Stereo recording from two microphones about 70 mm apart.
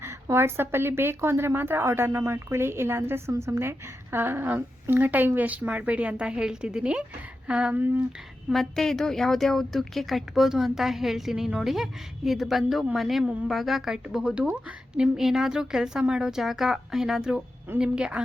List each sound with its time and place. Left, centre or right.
0.0 s a woman's voice: right
8.4 s a woman's voice: centre